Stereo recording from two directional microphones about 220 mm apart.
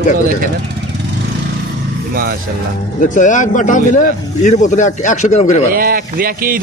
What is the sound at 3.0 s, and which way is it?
A man's voice, 35° left (ahead or behind).